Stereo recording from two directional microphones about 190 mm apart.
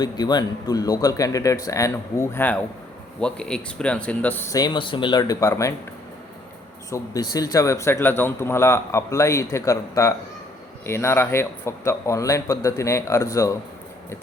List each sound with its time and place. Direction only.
0.0 s speech: 20° left (ahead or behind)
4.6 s speech: 25° left (ahead or behind)
6.9 s speech: 20° left (ahead or behind)